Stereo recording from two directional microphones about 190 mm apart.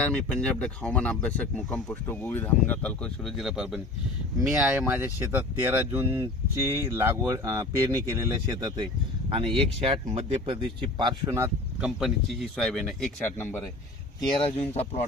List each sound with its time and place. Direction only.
0.0 s speech: 5° left (ahead or behind); by 11.9 s 15° right (ahead or behind)
11.9 s speech: centre (ahead or behind)
14.3 s speech: 30° left (ahead or behind)